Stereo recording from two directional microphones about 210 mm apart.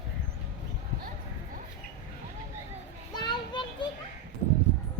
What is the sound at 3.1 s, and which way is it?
Children playing, 20° left (ahead or behind).